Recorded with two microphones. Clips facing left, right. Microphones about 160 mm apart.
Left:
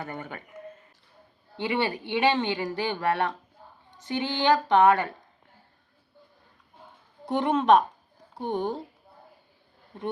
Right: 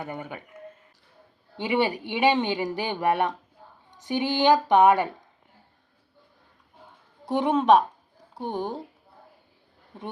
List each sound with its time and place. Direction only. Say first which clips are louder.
0.0 s speech: right 2 dB; 10° right (ahead or behind)
1.6 s speech: right 3 dB; 15° right (ahead or behind)
7.3 s speech: right 1 dB; 5° right (ahead or behind)